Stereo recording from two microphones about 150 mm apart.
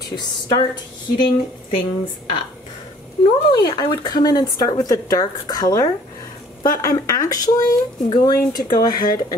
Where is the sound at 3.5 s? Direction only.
30° left (ahead or behind).